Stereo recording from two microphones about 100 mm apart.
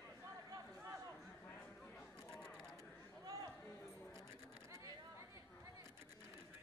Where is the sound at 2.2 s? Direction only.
5° left (ahead or behind).